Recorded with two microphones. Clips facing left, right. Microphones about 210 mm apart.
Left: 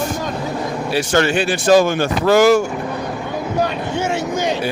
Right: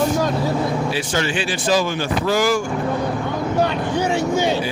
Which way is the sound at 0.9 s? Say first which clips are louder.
Left 6 dB; 65° left (ahead or behind).